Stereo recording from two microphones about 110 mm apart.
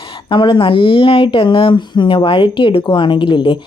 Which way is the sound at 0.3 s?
45° left (ahead or behind).